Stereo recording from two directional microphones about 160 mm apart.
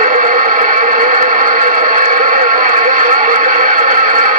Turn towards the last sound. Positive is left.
turn(degrees=-55)  # may be behind; listen again after turning